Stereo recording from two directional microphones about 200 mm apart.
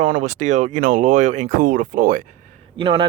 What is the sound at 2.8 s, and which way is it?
Speech, 25° right (ahead or behind).